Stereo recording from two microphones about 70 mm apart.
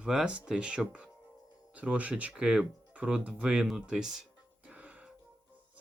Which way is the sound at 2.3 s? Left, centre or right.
Centre.